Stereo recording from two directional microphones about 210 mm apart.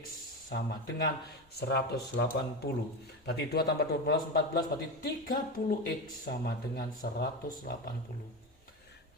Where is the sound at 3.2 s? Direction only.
50° left (ahead or behind).